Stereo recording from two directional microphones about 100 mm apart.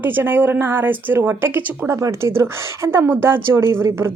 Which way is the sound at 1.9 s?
30° right (ahead or behind).